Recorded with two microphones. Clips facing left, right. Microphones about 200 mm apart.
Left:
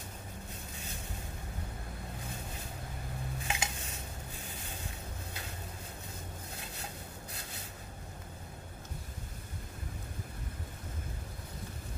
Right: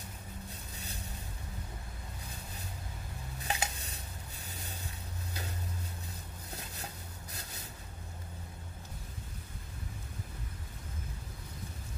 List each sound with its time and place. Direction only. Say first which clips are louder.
3.4 s cutlery: right 3 dB; 35° right (ahead or behind)